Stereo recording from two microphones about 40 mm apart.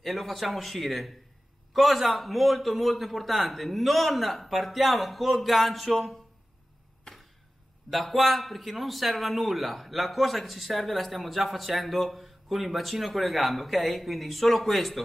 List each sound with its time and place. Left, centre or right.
0.0 s speech: centre
7.1 s chop: left
7.9 s speech: centre